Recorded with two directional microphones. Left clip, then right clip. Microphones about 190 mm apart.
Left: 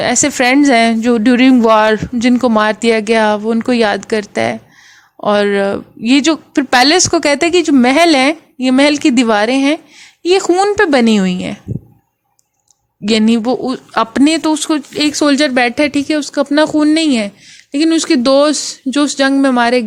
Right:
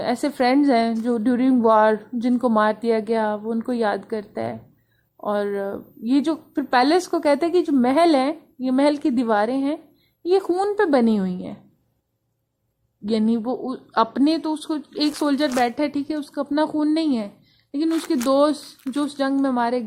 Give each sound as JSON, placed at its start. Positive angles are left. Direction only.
{"t": 0.0, "sound": "speech", "side_deg": 45}
{"t": 13.1, "sound": "speech", "side_deg": 45}